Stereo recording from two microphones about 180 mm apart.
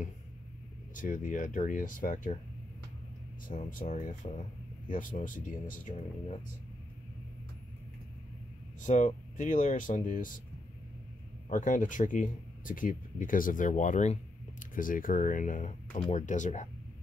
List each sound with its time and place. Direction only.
0.9 s speech: 45° left (ahead or behind)
3.7 s speech: 45° left (ahead or behind)
8.8 s speech: 40° left (ahead or behind)
11.4 s speech: 45° left (ahead or behind)